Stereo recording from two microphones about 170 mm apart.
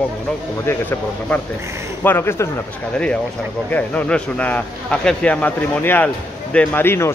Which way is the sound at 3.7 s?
10° left (ahead or behind).